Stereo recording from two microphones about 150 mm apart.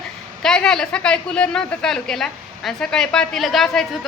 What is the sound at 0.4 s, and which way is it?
A woman's voice, 5° left (ahead or behind).